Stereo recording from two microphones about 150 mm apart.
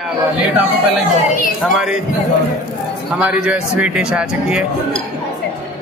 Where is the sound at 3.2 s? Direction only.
10° right (ahead or behind).